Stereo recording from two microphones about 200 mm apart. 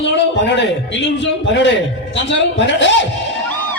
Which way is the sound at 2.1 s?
65° left (ahead or behind).